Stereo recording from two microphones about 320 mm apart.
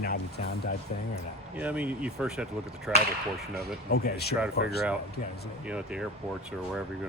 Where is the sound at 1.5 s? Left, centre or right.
Centre.